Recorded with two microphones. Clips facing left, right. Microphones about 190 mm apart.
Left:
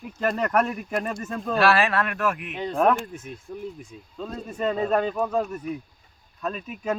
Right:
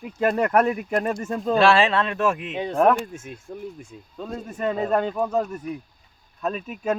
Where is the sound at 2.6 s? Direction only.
15° right (ahead or behind).